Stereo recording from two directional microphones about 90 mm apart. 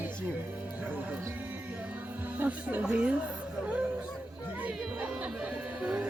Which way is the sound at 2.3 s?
20° right (ahead or behind).